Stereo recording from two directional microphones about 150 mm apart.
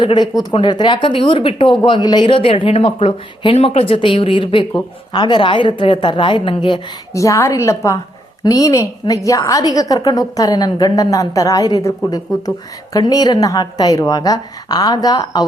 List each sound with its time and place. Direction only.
0.0 s speech: 30° left (ahead or behind)
7.1 s a woman's voice: 20° left (ahead or behind)